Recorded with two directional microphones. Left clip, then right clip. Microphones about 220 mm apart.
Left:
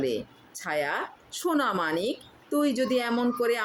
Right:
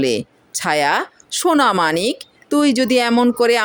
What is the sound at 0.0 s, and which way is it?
Speech, 45° right (ahead or behind).